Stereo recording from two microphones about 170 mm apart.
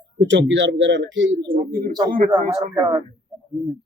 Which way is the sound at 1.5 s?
55° right (ahead or behind).